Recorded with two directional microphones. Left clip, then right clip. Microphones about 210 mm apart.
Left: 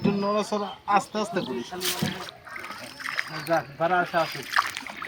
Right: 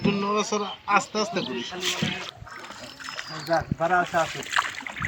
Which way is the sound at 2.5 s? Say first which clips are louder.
Left 2 dB; 15° right (ahead or behind).